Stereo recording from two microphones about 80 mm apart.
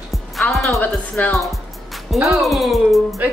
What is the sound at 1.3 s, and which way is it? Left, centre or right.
A woman's voice, centre.